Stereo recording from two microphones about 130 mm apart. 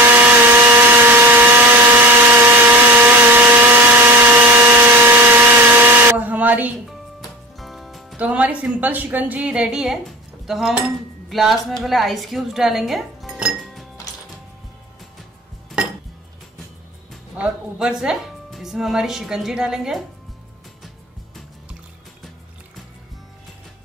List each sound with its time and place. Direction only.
0.0 s chainsaw: 15° right (ahead or behind)
7.5 s music: centre (ahead or behind)
8.2 s a woman's voice: 10° right (ahead or behind)
17.4 s a woman's voice: 5° right (ahead or behind)